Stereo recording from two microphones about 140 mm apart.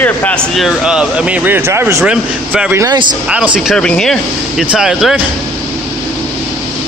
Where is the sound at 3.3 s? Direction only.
10° right (ahead or behind).